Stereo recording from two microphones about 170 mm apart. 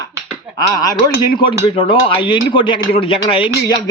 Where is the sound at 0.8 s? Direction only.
20° left (ahead or behind).